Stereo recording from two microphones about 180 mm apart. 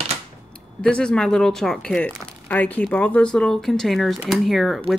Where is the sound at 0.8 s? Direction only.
5° left (ahead or behind).